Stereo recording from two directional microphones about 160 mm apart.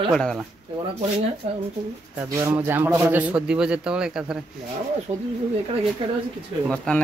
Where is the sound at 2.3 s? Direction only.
15° right (ahead or behind).